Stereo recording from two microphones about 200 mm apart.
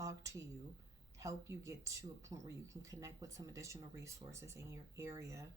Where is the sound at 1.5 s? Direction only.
15° right (ahead or behind).